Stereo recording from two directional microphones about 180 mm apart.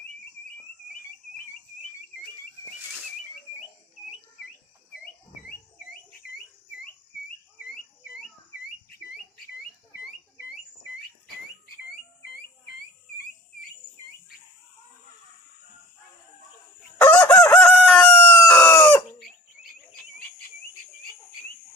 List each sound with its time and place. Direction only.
10.4 s rodents: 55° left (ahead or behind)
17.0 s chicken: 10° left (ahead or behind)